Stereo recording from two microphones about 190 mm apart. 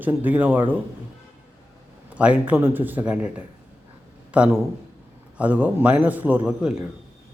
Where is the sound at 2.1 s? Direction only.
5° right (ahead or behind).